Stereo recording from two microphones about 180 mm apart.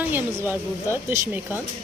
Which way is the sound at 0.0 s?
10° right (ahead or behind).